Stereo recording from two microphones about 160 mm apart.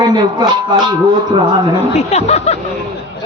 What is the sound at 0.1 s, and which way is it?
Speech, 30° right (ahead or behind).